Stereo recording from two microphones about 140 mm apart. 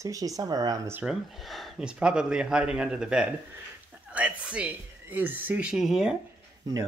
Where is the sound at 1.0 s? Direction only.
Centre (ahead or behind).